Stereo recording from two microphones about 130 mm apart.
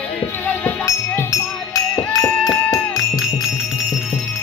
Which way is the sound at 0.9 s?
20° left (ahead or behind).